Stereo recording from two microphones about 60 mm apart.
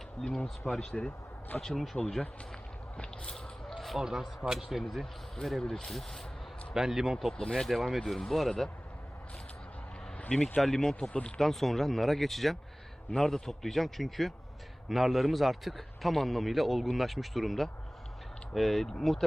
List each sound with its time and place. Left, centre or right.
0.2 s a man's voice: centre
3.0 s a man's voice: centre
6.7 s speech: centre
7.2 s a man's voice: centre
10.2 s a sound: centre
10.6 s a man's voice: centre